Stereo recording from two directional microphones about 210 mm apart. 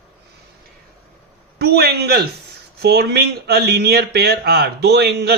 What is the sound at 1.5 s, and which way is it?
Speech, 50° right (ahead or behind).